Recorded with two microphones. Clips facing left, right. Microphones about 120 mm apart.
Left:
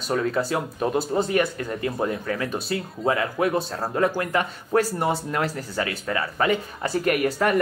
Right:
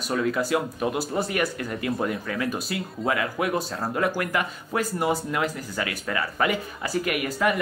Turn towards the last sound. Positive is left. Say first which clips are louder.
# left 4 dB
turn(degrees=40)  # may be behind; listen again after turning